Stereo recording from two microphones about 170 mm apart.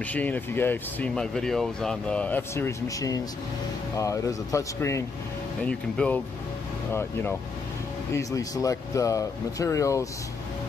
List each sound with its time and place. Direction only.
0.0 s speech: 10° left (ahead or behind)
5.6 s speech: 5° left (ahead or behind)